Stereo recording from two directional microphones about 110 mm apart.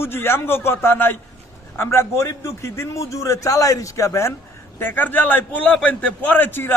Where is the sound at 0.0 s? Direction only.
20° left (ahead or behind).